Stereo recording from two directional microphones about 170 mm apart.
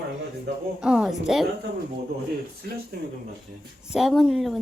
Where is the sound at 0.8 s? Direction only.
5° right (ahead or behind).